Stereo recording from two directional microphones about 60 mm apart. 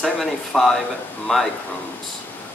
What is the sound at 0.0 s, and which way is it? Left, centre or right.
Speech, centre.